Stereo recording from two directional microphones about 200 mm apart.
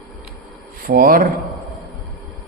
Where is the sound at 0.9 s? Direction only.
45° right (ahead or behind).